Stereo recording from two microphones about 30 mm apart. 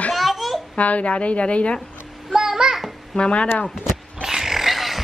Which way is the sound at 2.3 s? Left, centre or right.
Centre.